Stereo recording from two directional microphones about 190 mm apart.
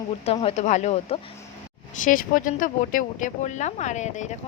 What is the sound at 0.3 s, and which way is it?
Speech, 35° left (ahead or behind).